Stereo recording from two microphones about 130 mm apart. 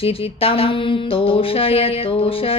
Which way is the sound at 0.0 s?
45° left (ahead or behind).